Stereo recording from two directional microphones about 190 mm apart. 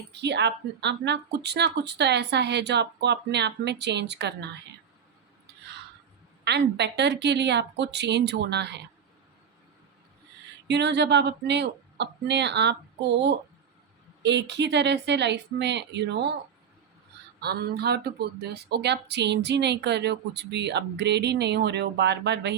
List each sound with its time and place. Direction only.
0.1 s speech: 65° right (ahead or behind)
6.4 s speech: 60° right (ahead or behind)
10.7 s speech: 65° right (ahead or behind)
14.2 s speech: 65° right (ahead or behind)
17.4 s speech: 60° right (ahead or behind)